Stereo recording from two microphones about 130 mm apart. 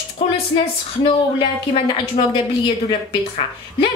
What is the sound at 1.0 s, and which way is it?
A woman's voice, 40° left (ahead or behind).